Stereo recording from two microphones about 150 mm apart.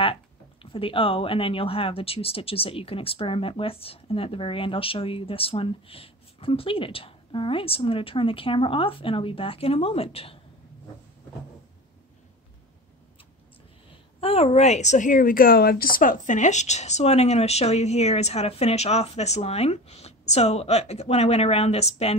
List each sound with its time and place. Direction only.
0.0 s speech: 35° left (ahead or behind)
14.2 s speech: 45° left (ahead or behind)